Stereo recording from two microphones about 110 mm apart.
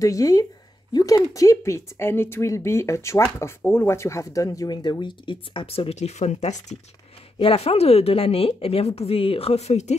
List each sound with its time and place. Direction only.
0.0 s speech: 30° left (ahead or behind); by 6.8 s 85° left
7.3 s speech: 60° left (ahead or behind); by 9.9 s 85° left